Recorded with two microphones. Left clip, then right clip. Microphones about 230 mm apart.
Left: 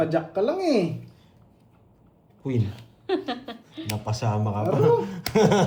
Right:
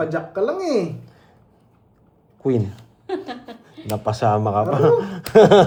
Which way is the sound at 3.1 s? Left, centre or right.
Centre.